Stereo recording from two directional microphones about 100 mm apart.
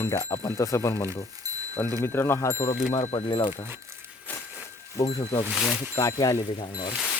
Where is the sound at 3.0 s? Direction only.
90° left.